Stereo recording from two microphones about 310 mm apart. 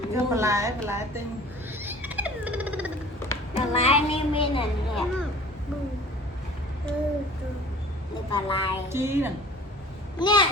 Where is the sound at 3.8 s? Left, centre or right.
Centre.